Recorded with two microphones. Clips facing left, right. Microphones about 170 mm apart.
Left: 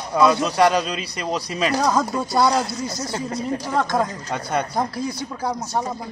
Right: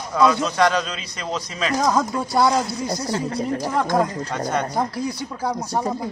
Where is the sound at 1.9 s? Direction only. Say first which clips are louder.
Even; centre (ahead or behind).